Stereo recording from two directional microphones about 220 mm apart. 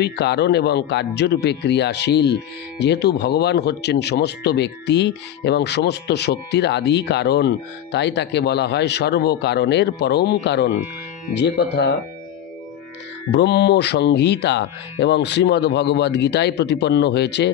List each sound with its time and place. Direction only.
0.0 s speech: 50° left (ahead or behind)
13.3 s speech: 50° left (ahead or behind)